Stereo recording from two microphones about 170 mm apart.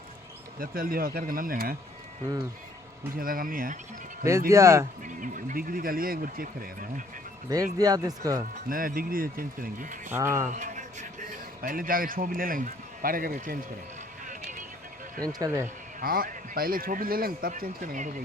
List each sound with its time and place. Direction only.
0.6 s a man's voice: 60° right (ahead or behind)
3.2 s a man's voice: 55° right (ahead or behind)
4.3 s speech: 15° right (ahead or behind)
5.0 s speech: 50° right (ahead or behind)
7.5 s speech: 20° right (ahead or behind)
8.7 s a man's voice: 55° right (ahead or behind)
10.1 s speech: 15° right (ahead or behind)
10.5 s a man's voice: 45° right (ahead or behind)
15.2 s speech: 20° right (ahead or behind)
16.0 s a man's voice: 55° right (ahead or behind)